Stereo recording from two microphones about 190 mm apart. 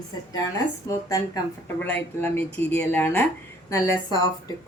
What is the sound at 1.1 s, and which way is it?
Speech, 15° left (ahead or behind).